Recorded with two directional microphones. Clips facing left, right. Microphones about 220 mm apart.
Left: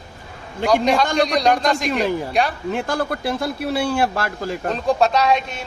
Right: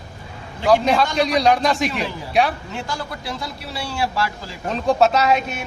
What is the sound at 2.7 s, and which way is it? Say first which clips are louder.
A man's voice: left 7 dB; 55° left (ahead or behind).